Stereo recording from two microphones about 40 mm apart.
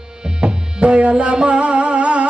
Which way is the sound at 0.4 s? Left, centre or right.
Right.